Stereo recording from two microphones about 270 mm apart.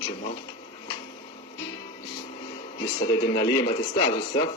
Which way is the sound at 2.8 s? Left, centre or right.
Centre.